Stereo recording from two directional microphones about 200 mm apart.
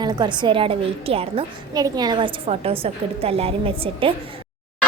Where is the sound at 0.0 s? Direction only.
20° right (ahead or behind).